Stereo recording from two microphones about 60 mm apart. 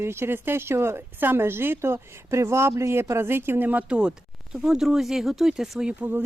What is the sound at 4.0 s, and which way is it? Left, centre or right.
Speech, centre.